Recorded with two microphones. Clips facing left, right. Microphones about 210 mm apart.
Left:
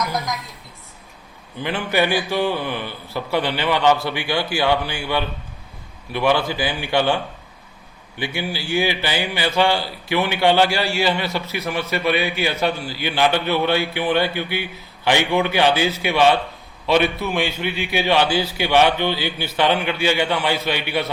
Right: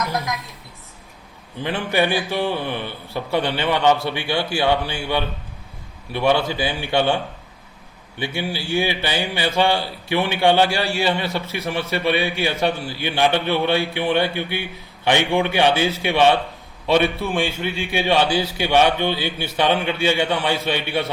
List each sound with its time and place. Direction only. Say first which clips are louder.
1.7 s speech: even; 20° right (ahead or behind)
8.4 s speech: even; 25° right (ahead or behind)